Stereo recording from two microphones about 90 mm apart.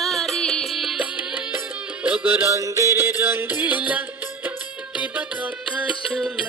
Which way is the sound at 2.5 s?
35° right (ahead or behind).